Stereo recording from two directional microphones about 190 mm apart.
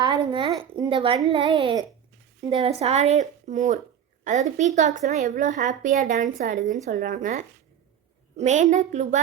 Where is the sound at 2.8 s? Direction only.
35° right (ahead or behind).